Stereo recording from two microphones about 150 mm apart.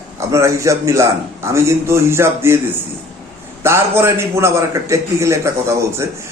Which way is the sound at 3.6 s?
15° right (ahead or behind).